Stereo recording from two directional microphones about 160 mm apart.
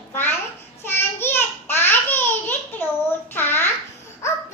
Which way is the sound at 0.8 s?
15° left (ahead or behind).